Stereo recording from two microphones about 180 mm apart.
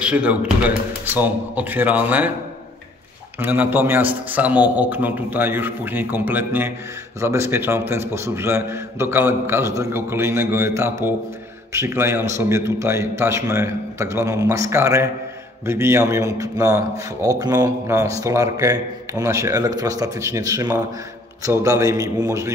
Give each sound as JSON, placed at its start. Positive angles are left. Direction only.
{"t": 0.0, "sound": "a man's voice", "side_deg": -5}
{"t": 3.3, "sound": "a man's voice", "side_deg": -10}